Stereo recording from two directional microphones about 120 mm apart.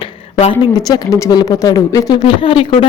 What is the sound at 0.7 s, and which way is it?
Speech, 30° left (ahead or behind).